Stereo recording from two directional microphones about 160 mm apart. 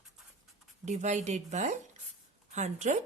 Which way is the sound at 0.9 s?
45° right (ahead or behind).